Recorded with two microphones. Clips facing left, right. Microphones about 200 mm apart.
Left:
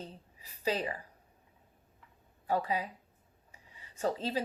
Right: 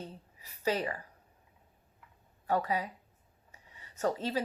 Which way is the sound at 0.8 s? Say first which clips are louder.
Right 1 dB; 15° left (ahead or behind).